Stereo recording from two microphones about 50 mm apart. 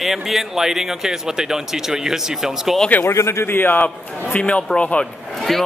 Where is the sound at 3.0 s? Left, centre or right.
Left.